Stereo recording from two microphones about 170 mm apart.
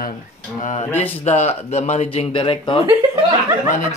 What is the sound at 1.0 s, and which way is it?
Speech, 40° left (ahead or behind).